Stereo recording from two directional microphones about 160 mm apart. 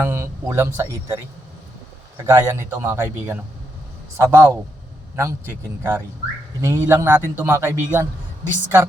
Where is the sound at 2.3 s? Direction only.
15° right (ahead or behind).